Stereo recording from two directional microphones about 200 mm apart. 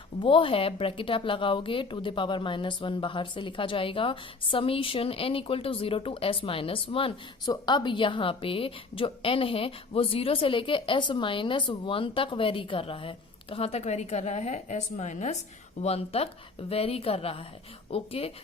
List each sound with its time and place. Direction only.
0.2 s a woman's voice: 25° left (ahead or behind)